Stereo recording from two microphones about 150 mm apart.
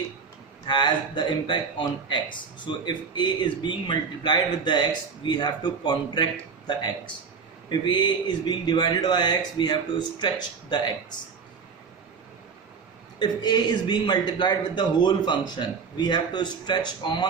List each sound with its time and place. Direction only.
0.7 s a man's voice: 30° left (ahead or behind)
13.1 s a man's voice: 30° left (ahead or behind)